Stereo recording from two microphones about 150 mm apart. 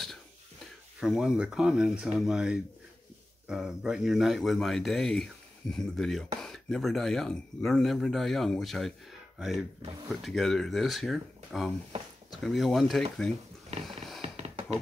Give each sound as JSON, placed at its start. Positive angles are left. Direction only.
{"t": 0.9, "sound": "speech", "side_deg": -5}
{"t": 13.8, "sound": "purr", "side_deg": 0}
{"t": 14.2, "sound": "a sound", "side_deg": -40}